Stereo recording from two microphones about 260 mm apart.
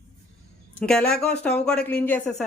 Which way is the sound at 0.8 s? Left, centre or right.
Centre.